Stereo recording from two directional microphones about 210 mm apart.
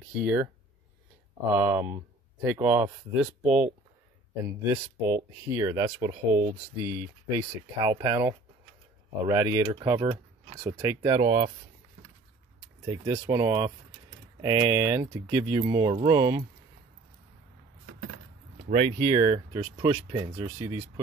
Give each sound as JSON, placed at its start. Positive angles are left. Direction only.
{"t": 0.2, "sound": "speech", "side_deg": -10}
{"t": 1.5, "sound": "speech", "side_deg": -10}
{"t": 12.8, "sound": "speech", "side_deg": -20}
{"t": 17.8, "sound": "a sound", "side_deg": -60}
{"t": 18.7, "sound": "speech", "side_deg": -25}